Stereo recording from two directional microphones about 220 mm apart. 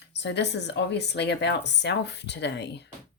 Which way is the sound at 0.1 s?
50° left (ahead or behind).